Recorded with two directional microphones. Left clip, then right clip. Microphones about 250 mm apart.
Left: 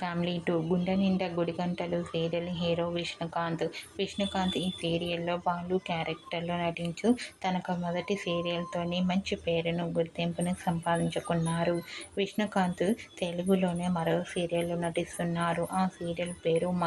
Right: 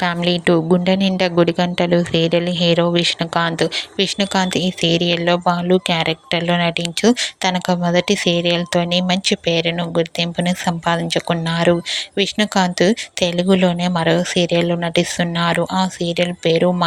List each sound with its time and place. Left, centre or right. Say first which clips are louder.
0.0 s a woman's voice: right 15 dB; right